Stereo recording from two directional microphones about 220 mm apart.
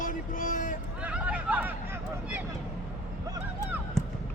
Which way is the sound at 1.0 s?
5° right (ahead or behind).